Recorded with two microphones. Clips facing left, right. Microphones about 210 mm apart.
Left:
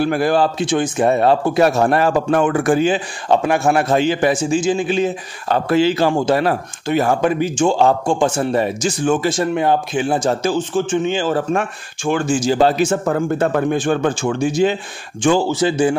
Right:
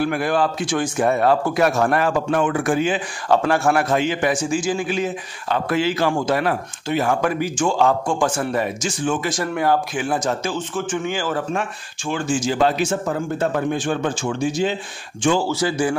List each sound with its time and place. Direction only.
0.0 s speech: 35° left (ahead or behind)
3.3 s speech: 20° left (ahead or behind); by 9.3 s 40° left (ahead or behind)
9.3 s speech: 25° left (ahead or behind)
10.9 s speech: 25° left (ahead or behind)
11.5 s speech: 55° left (ahead or behind)
12.4 s speech: 35° left (ahead or behind)
13.0 s speech: 55° left (ahead or behind)
15.4 s speech: 20° left (ahead or behind)